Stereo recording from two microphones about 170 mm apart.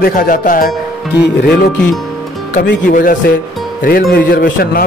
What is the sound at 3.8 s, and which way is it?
A man's voice, 65° left (ahead or behind).